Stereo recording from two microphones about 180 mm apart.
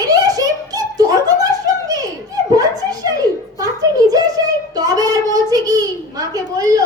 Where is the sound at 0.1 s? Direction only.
20° right (ahead or behind).